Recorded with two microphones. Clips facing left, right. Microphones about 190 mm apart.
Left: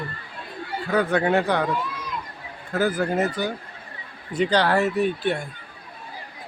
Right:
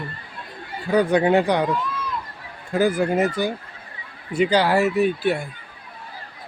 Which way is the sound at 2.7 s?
10° right (ahead or behind).